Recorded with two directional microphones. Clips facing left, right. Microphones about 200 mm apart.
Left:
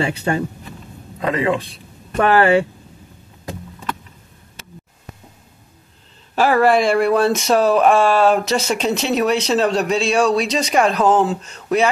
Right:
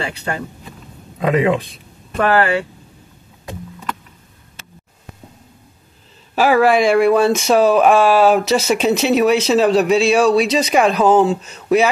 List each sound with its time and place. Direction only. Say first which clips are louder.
0.0 s speech: left 4 dB; 25° left (ahead or behind)
1.2 s speech: right 3 dB; 15° right (ahead or behind)
2.1 s speech: left 2 dB; 25° left (ahead or behind)
6.3 s speech: right 1 dB; 5° right (ahead or behind)